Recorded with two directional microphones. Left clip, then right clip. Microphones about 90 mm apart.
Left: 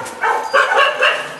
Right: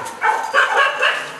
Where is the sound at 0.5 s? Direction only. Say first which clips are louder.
Left 4 dB; 20° left (ahead or behind).